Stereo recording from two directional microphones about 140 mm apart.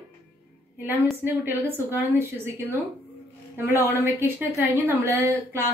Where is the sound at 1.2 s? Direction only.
15° right (ahead or behind).